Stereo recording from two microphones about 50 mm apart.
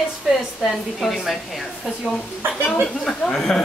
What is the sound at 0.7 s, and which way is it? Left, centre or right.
A woman's voice, centre.